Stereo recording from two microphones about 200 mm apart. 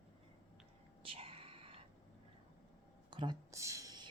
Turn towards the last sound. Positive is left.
turn(degrees=-20)  # may be behind; listen again after turning